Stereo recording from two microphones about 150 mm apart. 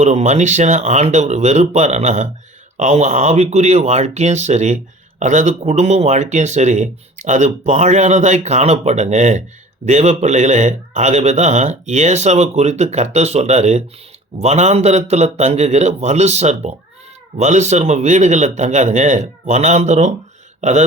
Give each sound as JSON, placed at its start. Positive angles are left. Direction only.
{"t": 0.0, "sound": "speech", "side_deg": -50}
{"t": 20.6, "sound": "throat clearing", "side_deg": -50}